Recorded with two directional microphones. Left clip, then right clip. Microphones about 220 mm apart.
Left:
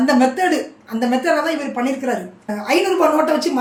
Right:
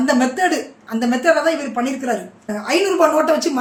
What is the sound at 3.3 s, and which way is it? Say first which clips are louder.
Speech: right 1 dB; 10° right (ahead or behind).